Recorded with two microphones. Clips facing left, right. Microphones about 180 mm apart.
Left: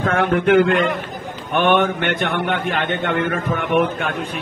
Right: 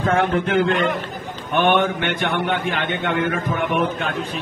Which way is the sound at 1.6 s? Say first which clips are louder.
Left 1 dB; 50° left (ahead or behind).